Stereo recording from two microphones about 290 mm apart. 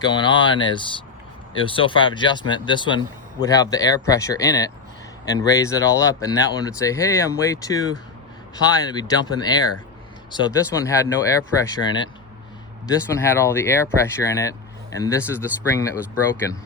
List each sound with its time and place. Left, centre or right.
0.0 s speech: centre